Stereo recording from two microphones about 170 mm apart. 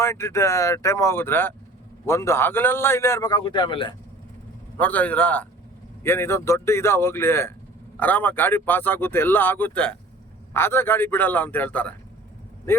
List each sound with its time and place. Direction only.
0.0 s a man's voice: 15° left (ahead or behind)
4.8 s a man's voice: 10° left (ahead or behind)